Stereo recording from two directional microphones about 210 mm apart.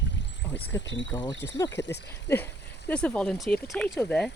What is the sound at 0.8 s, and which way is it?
Speech, 60° left (ahead or behind).